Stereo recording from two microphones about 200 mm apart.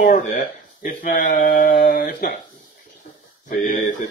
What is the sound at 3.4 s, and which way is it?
Speech, 40° left (ahead or behind).